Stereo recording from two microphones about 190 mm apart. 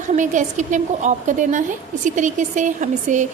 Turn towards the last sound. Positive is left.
turn(degrees=-40)  # may be behind; listen again after turning